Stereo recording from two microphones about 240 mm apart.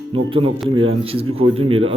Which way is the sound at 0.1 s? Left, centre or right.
Right.